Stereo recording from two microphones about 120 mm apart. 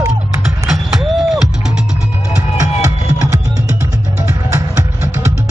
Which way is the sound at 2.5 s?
25° right (ahead or behind).